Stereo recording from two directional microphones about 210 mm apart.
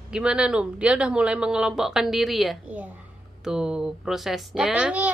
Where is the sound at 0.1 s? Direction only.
5° right (ahead or behind).